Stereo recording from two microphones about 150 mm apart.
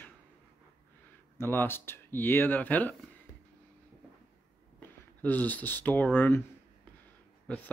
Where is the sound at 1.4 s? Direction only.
15° left (ahead or behind).